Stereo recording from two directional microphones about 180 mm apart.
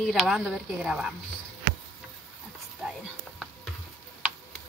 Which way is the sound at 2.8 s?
5° right (ahead or behind).